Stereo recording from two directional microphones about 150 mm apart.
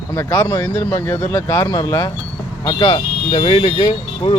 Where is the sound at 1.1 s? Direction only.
20° left (ahead or behind).